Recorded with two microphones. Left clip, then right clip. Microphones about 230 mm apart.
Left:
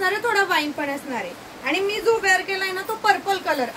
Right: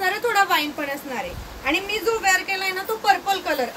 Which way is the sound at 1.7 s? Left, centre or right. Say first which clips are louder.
Left 2 dB; centre.